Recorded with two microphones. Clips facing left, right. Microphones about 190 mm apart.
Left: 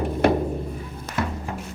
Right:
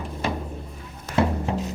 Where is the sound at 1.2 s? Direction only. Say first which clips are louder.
Right 6 dB; 25° right (ahead or behind).